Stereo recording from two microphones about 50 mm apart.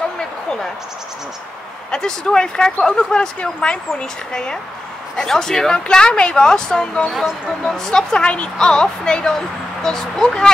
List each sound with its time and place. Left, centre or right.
0.2 s a sound: centre
1.9 s a woman's voice: centre
7.1 s speech: centre
7.6 s a woman's voice: centre